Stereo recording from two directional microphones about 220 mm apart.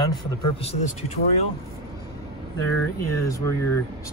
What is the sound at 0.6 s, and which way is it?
Speech, 30° left (ahead or behind).